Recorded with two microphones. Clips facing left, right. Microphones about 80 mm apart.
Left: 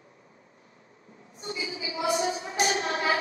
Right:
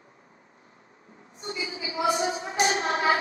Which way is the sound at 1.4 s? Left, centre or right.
Right.